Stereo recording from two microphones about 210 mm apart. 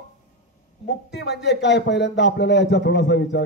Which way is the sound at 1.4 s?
55° left (ahead or behind).